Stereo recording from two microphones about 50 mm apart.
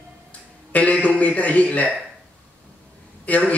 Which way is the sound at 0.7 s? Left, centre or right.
Left.